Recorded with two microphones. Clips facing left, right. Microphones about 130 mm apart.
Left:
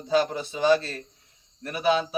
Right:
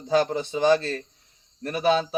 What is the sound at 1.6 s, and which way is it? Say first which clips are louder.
Speech: right 2 dB; 30° right (ahead or behind).